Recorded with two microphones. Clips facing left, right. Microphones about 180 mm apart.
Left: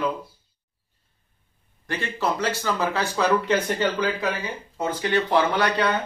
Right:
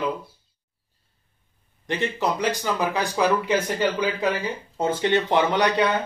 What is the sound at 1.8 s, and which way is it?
Speech, 20° right (ahead or behind).